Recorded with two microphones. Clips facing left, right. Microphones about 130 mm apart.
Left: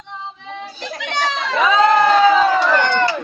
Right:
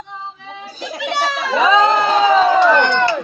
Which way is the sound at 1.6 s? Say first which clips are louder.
Left 1 dB; 25° right (ahead or behind).